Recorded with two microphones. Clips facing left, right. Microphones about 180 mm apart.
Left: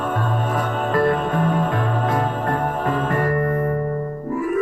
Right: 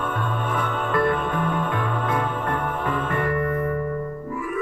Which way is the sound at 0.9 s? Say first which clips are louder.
Left 3 dB; 40° left (ahead or behind).